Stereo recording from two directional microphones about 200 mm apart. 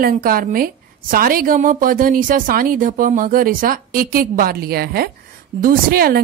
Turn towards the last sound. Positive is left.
turn(degrees=-50)  # may be behind; listen again after turning